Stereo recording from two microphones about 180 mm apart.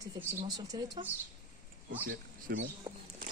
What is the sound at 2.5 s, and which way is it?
Speech, 55° right (ahead or behind).